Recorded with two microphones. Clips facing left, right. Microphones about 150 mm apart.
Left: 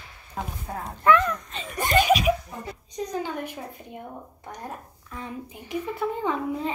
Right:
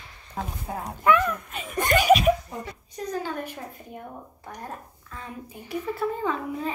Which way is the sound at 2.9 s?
15° left (ahead or behind).